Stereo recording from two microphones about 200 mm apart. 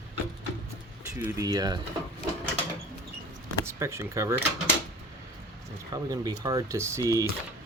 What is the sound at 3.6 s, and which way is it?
Speech, 15° right (ahead or behind).